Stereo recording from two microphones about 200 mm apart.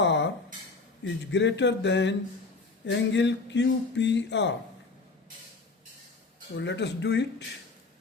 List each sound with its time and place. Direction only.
0.0 s a sound: 60° left (ahead or behind)
1.0 s speech: 65° left (ahead or behind)
6.6 s speech: 60° left (ahead or behind)